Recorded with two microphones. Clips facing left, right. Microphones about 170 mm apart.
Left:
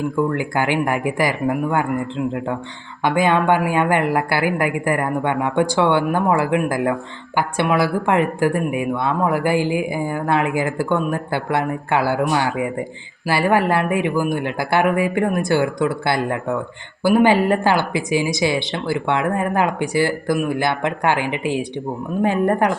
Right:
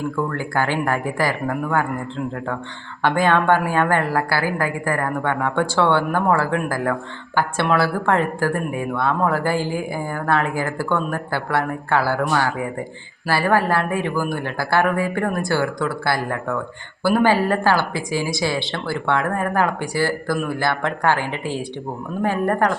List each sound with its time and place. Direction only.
0.2 s a woman's voice: 15° left (ahead or behind)